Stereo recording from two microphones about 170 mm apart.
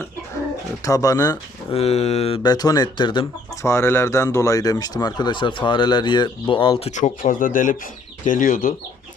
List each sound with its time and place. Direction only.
0.9 s speech: 20° left (ahead or behind)
1.7 s speech: 40° left (ahead or behind)
3.6 s speech: 15° left (ahead or behind); by 8.7 s 50° left (ahead or behind)